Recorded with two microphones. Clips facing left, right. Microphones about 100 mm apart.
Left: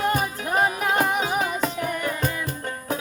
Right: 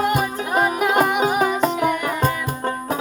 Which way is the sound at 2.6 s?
35° right (ahead or behind).